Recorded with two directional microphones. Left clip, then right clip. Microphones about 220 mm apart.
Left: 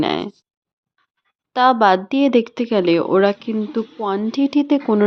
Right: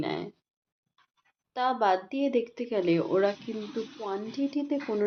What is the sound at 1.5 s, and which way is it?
Speech, 45° left (ahead or behind).